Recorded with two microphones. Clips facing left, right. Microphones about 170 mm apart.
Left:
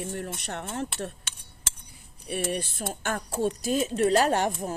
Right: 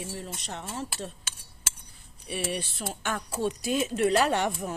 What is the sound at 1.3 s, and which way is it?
Cutlery, 5° right (ahead or behind).